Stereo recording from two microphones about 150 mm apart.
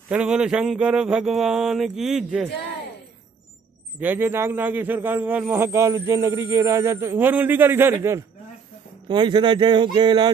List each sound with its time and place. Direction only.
0.1 s speech: 5° right (ahead or behind)
4.0 s speech: 15° right (ahead or behind)
9.0 s speech: 30° right (ahead or behind)